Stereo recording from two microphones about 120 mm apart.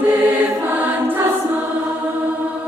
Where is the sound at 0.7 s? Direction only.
15° right (ahead or behind).